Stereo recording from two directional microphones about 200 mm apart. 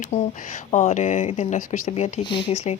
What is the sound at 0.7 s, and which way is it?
Speech, 35° left (ahead or behind).